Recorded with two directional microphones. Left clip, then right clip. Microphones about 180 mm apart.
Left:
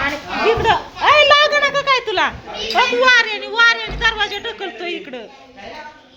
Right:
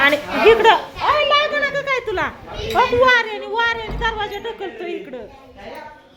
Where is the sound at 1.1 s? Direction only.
30° left (ahead or behind).